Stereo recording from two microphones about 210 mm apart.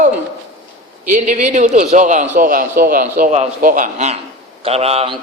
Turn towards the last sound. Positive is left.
turn(degrees=-30)  # may be behind; listen again after turning